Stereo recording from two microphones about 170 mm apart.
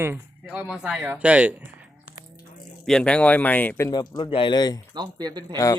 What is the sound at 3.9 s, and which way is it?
Speech, 25° left (ahead or behind).